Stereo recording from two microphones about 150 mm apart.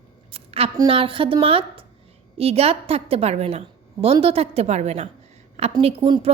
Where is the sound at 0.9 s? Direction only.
35° right (ahead or behind).